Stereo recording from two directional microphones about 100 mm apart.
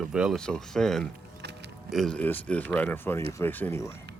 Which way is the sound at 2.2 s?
15° left (ahead or behind).